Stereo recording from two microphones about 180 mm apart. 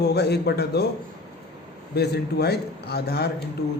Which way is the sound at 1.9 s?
65° left (ahead or behind).